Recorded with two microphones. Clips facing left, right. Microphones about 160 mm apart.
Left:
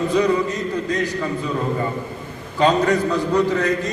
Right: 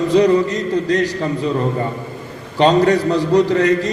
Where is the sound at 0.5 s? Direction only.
80° right.